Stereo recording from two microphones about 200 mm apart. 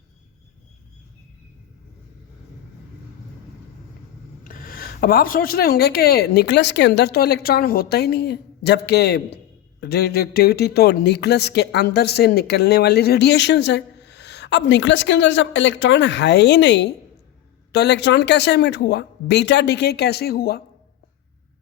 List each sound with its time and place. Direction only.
4.4 s speech: 45° left (ahead or behind)